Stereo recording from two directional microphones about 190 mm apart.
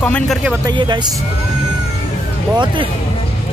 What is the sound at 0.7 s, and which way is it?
Speech, 25° right (ahead or behind).